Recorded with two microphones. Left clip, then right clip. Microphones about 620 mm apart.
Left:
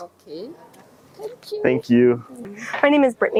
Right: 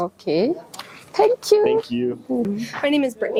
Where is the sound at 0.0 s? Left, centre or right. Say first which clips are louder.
Right 14 dB; right.